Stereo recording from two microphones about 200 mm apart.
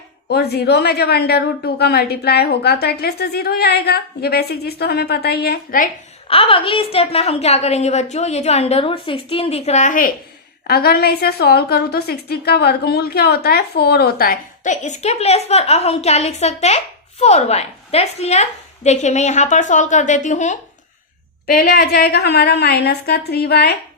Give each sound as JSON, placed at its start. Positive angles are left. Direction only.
{"t": 0.3, "sound": "a woman's voice", "side_deg": 55}
{"t": 6.2, "sound": "a woman's voice", "side_deg": 25}
{"t": 10.7, "sound": "a woman's voice", "side_deg": 50}
{"t": 21.4, "sound": "a woman's voice", "side_deg": 50}